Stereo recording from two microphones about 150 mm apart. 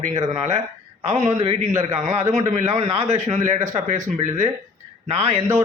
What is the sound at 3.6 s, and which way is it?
Speech, 20° right (ahead or behind).